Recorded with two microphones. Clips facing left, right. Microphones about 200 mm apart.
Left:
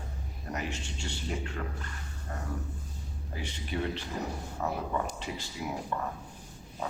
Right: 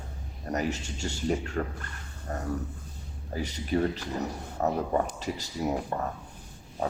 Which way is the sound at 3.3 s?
40° right (ahead or behind).